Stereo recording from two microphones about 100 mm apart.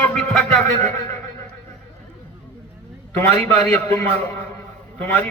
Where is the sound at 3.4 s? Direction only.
20° left (ahead or behind).